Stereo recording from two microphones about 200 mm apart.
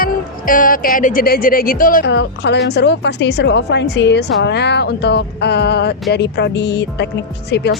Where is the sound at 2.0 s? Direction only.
60° left (ahead or behind).